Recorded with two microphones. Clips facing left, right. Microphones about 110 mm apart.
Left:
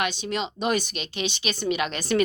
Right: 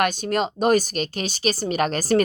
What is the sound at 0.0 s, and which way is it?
Speech, 45° right (ahead or behind).